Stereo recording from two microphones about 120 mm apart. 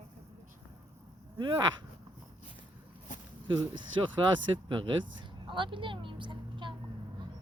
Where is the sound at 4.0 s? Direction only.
40° right (ahead or behind).